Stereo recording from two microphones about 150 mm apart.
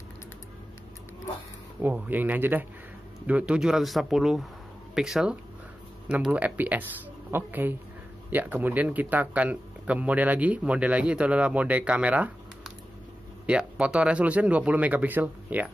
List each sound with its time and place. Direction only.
1.8 s a man's voice: 10° right (ahead or behind)